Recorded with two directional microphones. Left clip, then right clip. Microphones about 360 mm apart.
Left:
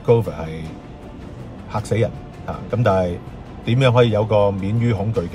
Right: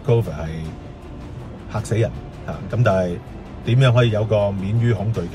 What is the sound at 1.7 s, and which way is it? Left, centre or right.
Speech, centre.